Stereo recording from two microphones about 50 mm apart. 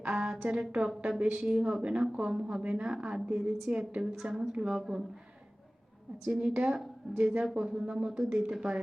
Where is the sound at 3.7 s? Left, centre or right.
Right.